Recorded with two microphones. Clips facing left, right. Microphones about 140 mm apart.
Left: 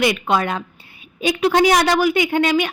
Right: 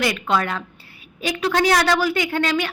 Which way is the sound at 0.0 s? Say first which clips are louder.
Left 3 dB; 20° left (ahead or behind).